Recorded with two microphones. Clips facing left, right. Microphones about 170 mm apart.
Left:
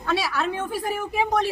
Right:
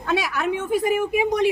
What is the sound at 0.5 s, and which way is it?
Speech, 20° right (ahead or behind).